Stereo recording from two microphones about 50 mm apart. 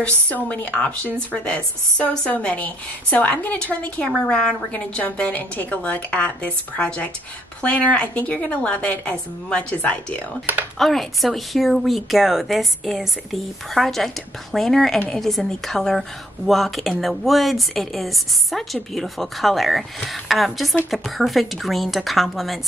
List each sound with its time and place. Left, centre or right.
0.0 s a woman's voice: left
4.3 s a woman's voice: centre
4.7 s a woman's voice: left
10.8 s a woman's voice: centre